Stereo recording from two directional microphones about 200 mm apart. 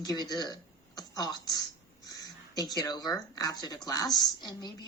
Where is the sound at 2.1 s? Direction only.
20° left (ahead or behind).